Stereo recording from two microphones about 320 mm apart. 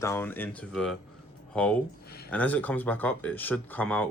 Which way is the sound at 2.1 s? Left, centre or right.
Left.